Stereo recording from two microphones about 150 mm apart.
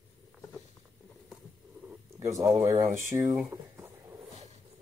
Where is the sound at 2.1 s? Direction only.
20° right (ahead or behind).